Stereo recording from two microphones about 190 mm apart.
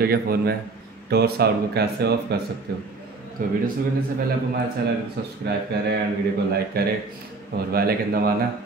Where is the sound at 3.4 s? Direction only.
45° right (ahead or behind).